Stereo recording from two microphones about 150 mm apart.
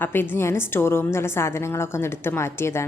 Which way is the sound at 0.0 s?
15° left (ahead or behind).